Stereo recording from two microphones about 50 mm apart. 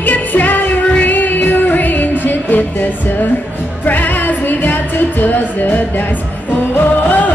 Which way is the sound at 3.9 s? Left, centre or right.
Left.